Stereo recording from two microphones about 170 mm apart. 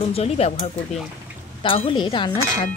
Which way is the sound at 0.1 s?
35° left (ahead or behind).